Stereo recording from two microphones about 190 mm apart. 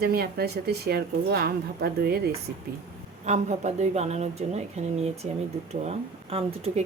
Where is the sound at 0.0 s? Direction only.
55° right (ahead or behind).